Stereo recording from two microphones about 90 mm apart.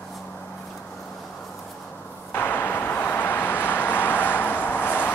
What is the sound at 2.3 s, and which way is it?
Vehicle, 20° left (ahead or behind).